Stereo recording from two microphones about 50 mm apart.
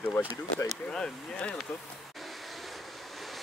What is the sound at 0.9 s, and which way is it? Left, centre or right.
Speech, left.